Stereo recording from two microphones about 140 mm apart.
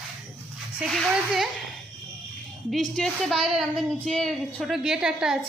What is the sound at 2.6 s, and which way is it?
A woman's voice, centre (ahead or behind).